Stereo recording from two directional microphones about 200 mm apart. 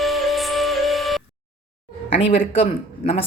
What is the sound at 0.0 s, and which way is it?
Music, centre (ahead or behind).